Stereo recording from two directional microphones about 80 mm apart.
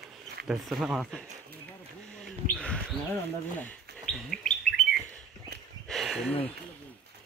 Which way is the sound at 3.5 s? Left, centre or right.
Centre.